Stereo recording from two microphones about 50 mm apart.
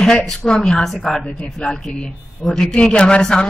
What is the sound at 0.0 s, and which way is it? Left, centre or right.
A woman's voice, centre.